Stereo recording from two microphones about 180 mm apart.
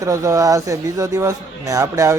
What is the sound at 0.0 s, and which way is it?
Speech, 15° right (ahead or behind).